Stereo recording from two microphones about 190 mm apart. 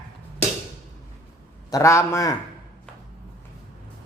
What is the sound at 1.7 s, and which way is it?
Speech, 15° left (ahead or behind).